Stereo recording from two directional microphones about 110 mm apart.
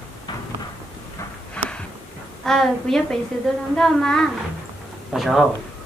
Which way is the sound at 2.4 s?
5° left (ahead or behind).